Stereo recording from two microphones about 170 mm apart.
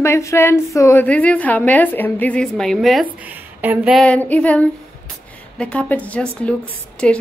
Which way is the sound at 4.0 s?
10° left (ahead or behind).